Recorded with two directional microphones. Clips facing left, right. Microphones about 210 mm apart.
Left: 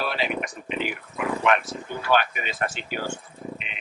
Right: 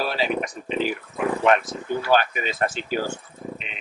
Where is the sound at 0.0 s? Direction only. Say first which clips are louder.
Right 3 dB; 35° right (ahead or behind).